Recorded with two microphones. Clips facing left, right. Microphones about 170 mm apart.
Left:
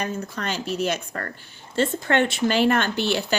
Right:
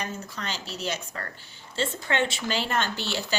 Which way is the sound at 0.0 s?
55° left (ahead or behind).